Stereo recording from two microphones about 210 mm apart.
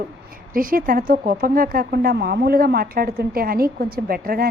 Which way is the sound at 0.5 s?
40° right (ahead or behind).